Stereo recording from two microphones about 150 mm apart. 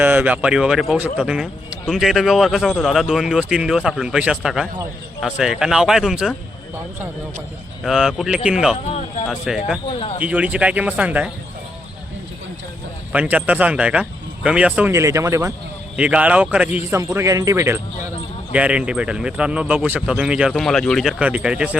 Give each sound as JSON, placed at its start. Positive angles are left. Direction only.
{"t": 0.0, "sound": "speech", "side_deg": -15}
{"t": 7.9, "sound": "speech", "side_deg": 0}
{"t": 13.1, "sound": "speech", "side_deg": -10}
{"t": 16.0, "sound": "speech", "side_deg": -10}
{"t": 17.2, "sound": "speech", "side_deg": -20}
{"t": 18.5, "sound": "speech", "side_deg": -10}